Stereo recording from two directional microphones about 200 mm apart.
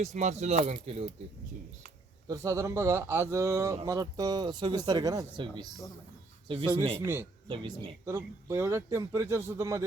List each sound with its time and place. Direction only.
0.0 s speech: 35° right (ahead or behind)
2.2 s speech: 15° right (ahead or behind)
7.0 s speech: 10° right (ahead or behind)
7.4 s speech: 25° right (ahead or behind)
8.0 s speech: 15° right (ahead or behind)